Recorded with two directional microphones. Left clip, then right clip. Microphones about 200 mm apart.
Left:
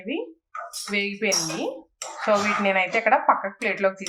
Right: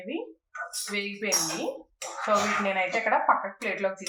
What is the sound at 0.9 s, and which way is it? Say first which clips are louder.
Speech: left 7 dB; 55° left (ahead or behind).